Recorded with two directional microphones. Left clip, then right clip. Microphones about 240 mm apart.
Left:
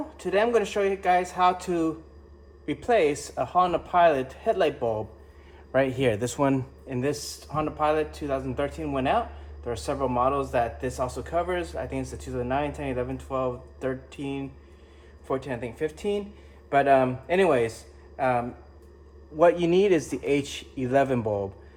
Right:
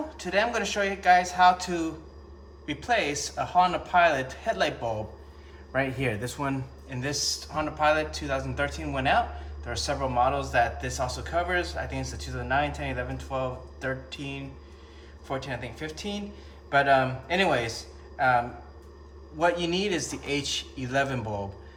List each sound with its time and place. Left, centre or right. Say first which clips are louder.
0.2 s speech: left 3 dB; centre
6.0 s speech: left 6 dB; left